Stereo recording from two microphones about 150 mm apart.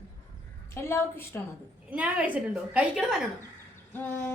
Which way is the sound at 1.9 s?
10° right (ahead or behind).